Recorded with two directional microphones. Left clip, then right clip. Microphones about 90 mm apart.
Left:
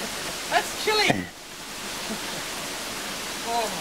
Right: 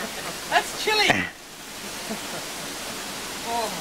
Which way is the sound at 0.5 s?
20° right (ahead or behind).